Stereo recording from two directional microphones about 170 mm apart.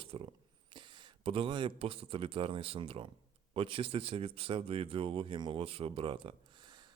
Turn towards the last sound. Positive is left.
turn(degrees=-30)  # may be behind; listen again after turning